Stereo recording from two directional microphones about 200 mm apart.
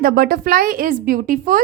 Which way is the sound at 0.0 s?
45° right (ahead or behind).